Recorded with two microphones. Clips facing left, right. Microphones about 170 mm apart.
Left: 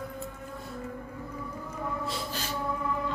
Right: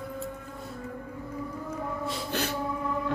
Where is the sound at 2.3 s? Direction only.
65° right (ahead or behind).